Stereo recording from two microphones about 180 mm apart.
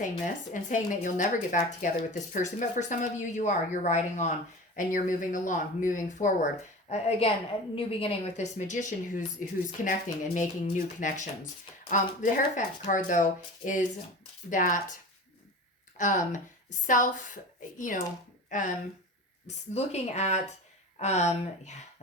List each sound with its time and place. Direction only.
0.5 s a woman's voice: 45° left (ahead or behind)
16.0 s speech: 45° left (ahead or behind)
19.7 s speech: 40° left (ahead or behind)